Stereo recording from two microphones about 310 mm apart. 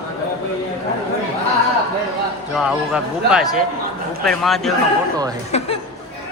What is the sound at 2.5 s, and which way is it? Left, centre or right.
A man's voice, centre.